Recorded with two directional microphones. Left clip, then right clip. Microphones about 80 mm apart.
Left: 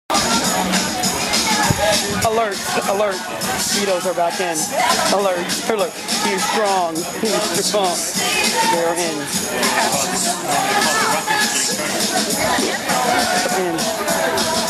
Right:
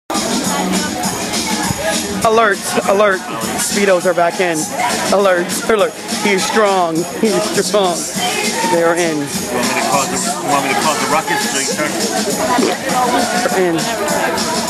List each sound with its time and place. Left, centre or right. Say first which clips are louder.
2.2 s speech: right 10 dB; right
5.1 s speech: right 5 dB; right